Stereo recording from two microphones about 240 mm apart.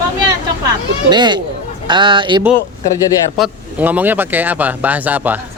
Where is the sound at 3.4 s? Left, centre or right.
Centre.